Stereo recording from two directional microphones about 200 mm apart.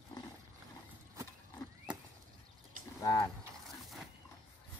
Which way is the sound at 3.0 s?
15° left (ahead or behind).